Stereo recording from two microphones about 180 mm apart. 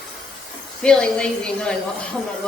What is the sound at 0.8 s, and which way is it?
Speech, 5° left (ahead or behind).